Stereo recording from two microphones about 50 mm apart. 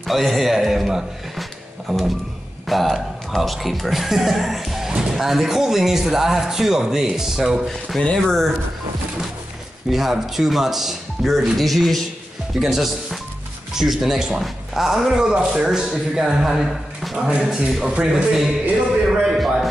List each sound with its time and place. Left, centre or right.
0.0 s speech: centre
7.9 s speech: centre
9.8 s a man's voice: centre